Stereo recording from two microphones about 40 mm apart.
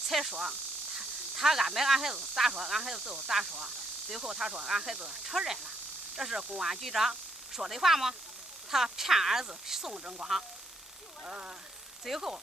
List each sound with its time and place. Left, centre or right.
0.1 s speech: centre
9.9 s speech: right
11.2 s speech: right
12.1 s speech: centre